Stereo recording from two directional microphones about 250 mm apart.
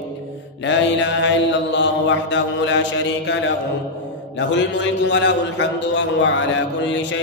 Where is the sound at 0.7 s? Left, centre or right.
Left.